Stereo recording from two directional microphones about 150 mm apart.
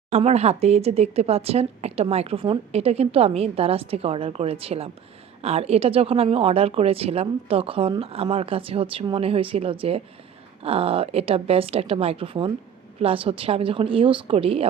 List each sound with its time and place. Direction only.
0.1 s speech: 45° right (ahead or behind)